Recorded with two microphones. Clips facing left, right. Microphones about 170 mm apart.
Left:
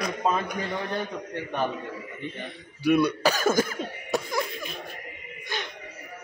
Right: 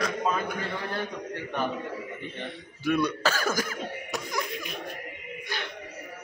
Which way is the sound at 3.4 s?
25° left (ahead or behind).